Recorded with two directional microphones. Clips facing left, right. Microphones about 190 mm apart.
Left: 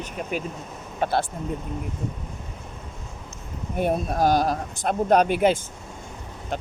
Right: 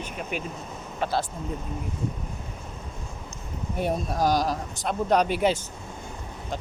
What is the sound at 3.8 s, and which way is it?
Speech, 55° left (ahead or behind).